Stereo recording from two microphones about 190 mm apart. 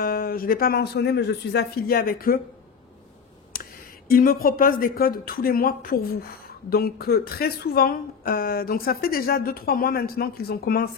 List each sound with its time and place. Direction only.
0.0 s speech: 50° left (ahead or behind)
3.5 s a sound: 50° left (ahead or behind)
4.1 s speech: 50° left (ahead or behind)